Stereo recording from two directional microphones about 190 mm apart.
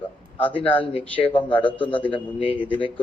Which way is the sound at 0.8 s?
30° left (ahead or behind).